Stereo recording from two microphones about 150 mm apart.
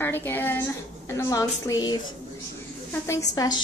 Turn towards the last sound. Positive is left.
turn(degrees=25)  # may be behind; listen again after turning